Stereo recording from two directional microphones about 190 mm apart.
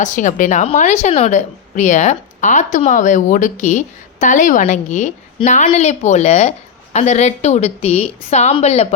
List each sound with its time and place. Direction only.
0.0 s a woman's voice: 40° left (ahead or behind)